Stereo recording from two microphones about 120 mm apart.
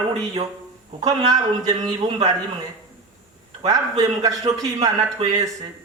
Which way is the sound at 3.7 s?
30° right (ahead or behind).